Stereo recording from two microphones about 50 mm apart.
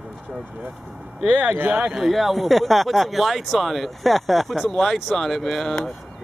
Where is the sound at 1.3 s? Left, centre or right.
Right.